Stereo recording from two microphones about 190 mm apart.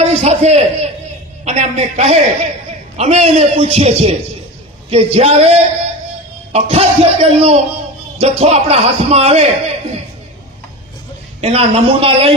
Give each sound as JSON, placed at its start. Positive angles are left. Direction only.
{"t": 0.0, "sound": "a man's voice", "side_deg": -35}
{"t": 11.3, "sound": "a man's voice", "side_deg": -30}